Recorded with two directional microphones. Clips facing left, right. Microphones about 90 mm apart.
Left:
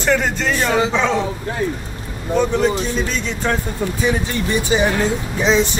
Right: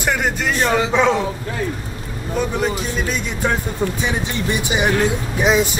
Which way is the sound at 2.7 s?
10° right (ahead or behind).